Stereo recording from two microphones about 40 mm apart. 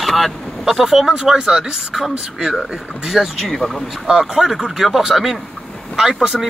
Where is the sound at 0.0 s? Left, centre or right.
Centre.